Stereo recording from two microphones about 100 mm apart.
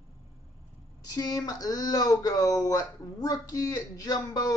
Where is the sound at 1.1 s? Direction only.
35° left (ahead or behind).